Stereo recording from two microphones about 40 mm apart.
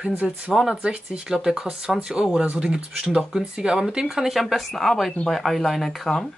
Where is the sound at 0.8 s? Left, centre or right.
Right.